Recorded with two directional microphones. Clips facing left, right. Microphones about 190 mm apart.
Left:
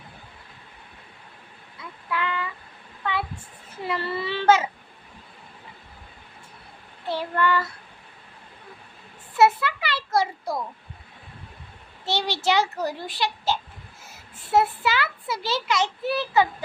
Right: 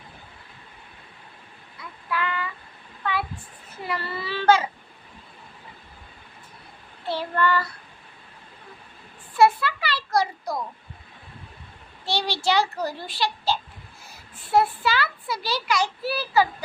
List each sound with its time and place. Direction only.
2.0 s child singing: 20° left (ahead or behind)
3.8 s a child's voice: 25° left (ahead or behind)
7.1 s child singing: 15° left (ahead or behind)
9.4 s a sound: 20° left (ahead or behind)
12.0 s a child's voice: 20° left (ahead or behind)